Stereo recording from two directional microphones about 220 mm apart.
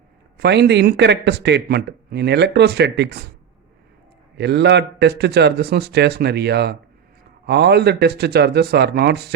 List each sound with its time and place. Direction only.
0.3 s a man's voice: 50° right (ahead or behind)
4.4 s a man's voice: 50° right (ahead or behind)